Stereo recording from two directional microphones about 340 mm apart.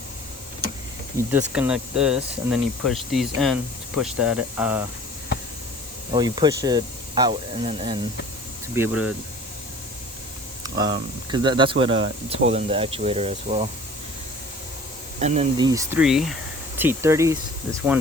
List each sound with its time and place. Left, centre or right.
1.3 s speech: centre
6.1 s speech: centre
8.7 s speech: centre
10.6 s speech: centre
15.2 s speech: centre